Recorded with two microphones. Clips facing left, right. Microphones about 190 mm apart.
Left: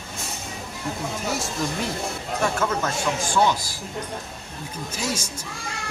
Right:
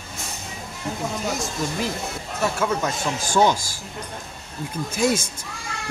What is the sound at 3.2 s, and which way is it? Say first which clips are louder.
Speech: right 4 dB; 45° right (ahead or behind).